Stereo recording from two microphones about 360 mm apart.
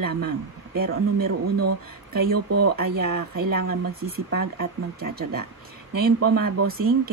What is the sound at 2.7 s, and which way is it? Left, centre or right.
Speech, right.